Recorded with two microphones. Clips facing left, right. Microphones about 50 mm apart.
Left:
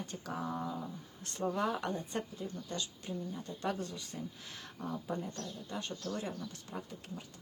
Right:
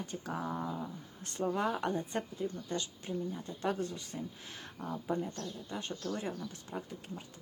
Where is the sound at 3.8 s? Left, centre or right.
Right.